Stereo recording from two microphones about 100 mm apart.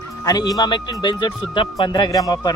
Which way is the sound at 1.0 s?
50° left (ahead or behind).